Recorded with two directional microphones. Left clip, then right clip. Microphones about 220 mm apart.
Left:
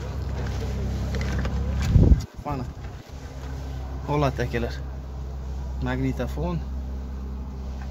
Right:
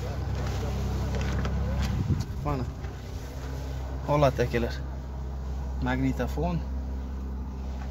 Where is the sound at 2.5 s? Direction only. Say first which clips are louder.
Left 1 dB; 5° left (ahead or behind).